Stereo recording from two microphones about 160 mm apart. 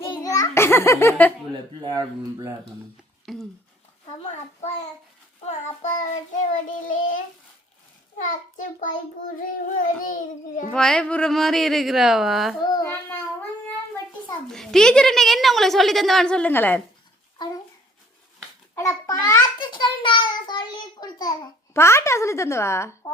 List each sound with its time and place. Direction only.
0.1 s a sound: 20° left (ahead or behind)
1.8 s speech: 25° right (ahead or behind)
3.3 s speech: 5° left (ahead or behind)
5.5 s a child's voice: 45° left (ahead or behind)
6.5 s child singing: 55° left (ahead or behind)
8.2 s a child's voice: 55° left (ahead or behind)
9.6 s child singing: 60° left (ahead or behind)
10.7 s a woman's voice: 5° left (ahead or behind)
12.7 s speech: 15° left (ahead or behind)
14.4 s a woman's voice: centre (ahead or behind)
17.3 s a child's voice: 25° left (ahead or behind)
18.7 s a child's voice: 20° left (ahead or behind)
19.5 s child singing: 30° left (ahead or behind)